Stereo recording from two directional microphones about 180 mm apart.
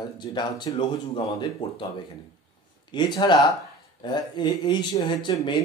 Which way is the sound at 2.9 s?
25° left (ahead or behind).